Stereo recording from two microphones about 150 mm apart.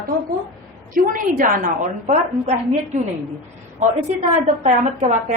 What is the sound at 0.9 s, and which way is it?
Speech, 65° right (ahead or behind).